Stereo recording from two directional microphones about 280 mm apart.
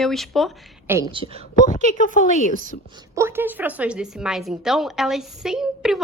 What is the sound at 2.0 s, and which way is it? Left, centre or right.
Speech, left.